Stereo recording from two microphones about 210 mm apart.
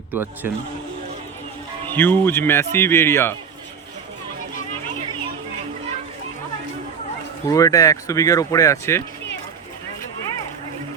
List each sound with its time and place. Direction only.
0.1 s speech: 10° right (ahead or behind)
1.9 s speech: 10° left (ahead or behind)
7.4 s speech: 15° left (ahead or behind)